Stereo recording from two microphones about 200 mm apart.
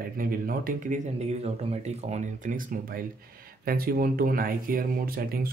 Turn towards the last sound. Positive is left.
turn(degrees=-50)  # may be behind; listen again after turning